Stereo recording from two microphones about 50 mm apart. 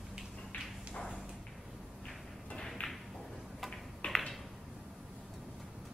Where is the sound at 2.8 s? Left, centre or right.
Left.